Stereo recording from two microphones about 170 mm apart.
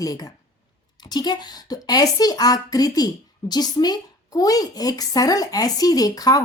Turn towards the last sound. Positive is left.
turn(degrees=20)  # may be behind; listen again after turning